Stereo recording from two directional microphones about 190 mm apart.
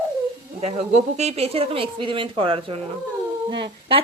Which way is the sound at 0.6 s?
35° right (ahead or behind).